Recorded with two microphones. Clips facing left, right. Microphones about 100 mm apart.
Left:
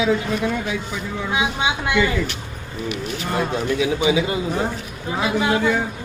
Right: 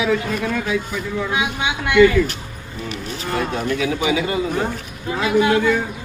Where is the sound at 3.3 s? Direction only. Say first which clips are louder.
Even; 20° left (ahead or behind).